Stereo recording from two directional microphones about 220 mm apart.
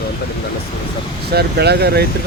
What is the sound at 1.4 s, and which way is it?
Speech, 45° right (ahead or behind).